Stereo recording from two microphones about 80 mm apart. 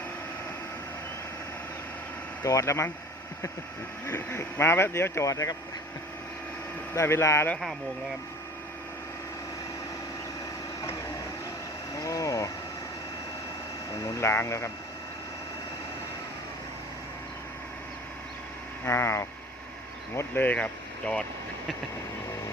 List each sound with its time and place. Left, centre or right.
2.4 s speech: left
4.0 s speech: left
6.9 s speech: left
11.9 s speech: left
14.0 s speech: left
18.9 s speech: left; by 21.2 s centre